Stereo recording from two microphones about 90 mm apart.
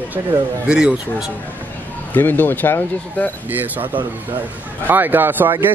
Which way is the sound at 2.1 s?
20° left (ahead or behind).